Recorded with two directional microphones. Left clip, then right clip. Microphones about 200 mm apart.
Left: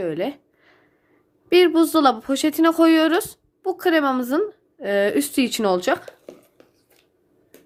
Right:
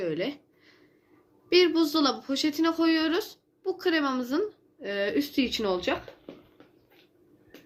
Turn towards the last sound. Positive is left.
turn(degrees=65)  # may be behind; listen again after turning